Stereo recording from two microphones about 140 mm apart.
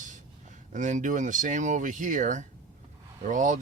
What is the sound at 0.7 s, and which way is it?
Speech, 60° right (ahead or behind).